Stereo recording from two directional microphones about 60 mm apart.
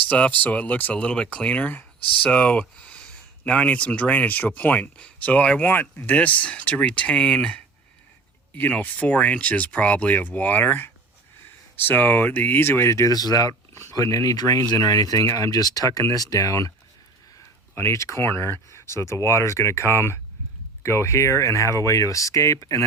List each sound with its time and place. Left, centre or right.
0.1 s speech: left
8.5 s speech: left
12.9 s speech: left
13.9 s speech: left
17.7 s speech: left